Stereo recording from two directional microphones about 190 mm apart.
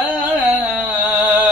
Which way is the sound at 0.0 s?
5° right (ahead or behind).